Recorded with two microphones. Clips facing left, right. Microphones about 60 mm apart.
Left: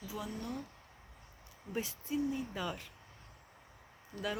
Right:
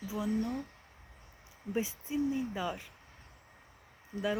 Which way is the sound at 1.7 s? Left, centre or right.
Centre.